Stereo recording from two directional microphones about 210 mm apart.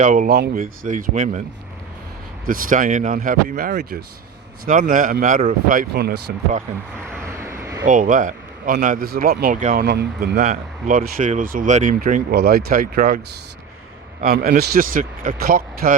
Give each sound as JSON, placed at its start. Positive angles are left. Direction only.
{"t": 0.0, "sound": "a man's voice", "side_deg": -40}
{"t": 0.5, "sound": "speech", "side_deg": -40}
{"t": 2.5, "sound": "speech", "side_deg": -40}
{"t": 7.2, "sound": "vehicle", "side_deg": -15}
{"t": 7.9, "sound": "speech", "side_deg": -40}
{"t": 9.8, "sound": "a man's voice", "side_deg": -50}
{"t": 10.5, "sound": "speech", "side_deg": -40}
{"t": 14.2, "sound": "a man's voice", "side_deg": -45}